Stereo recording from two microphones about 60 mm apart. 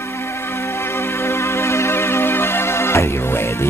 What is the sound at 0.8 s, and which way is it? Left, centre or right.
Music, left.